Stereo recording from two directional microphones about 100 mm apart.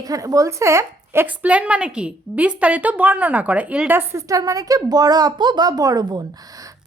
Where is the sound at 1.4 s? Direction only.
10° right (ahead or behind).